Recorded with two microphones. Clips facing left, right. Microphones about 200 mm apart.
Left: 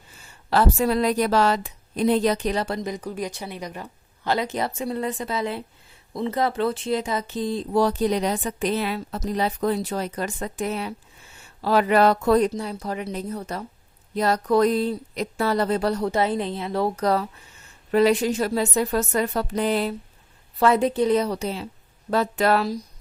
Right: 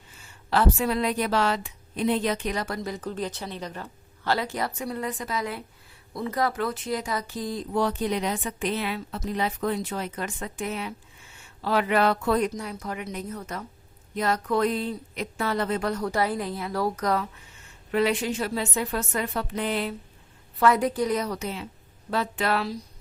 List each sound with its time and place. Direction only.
0.5 s a woman's voice: 40° left (ahead or behind)
20.6 s a woman's voice: 25° left (ahead or behind); by 22.8 s 40° left (ahead or behind)